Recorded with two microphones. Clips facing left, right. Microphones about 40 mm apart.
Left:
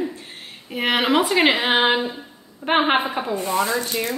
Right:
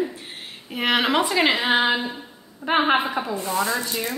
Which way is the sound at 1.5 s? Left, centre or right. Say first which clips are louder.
Left 2 dB; left.